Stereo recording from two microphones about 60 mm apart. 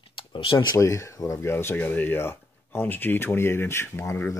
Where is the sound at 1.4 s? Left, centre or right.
Left.